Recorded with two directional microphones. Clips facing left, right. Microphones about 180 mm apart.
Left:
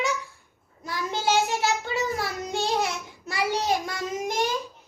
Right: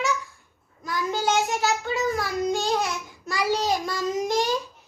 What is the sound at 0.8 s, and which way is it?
Child singing, 25° left (ahead or behind).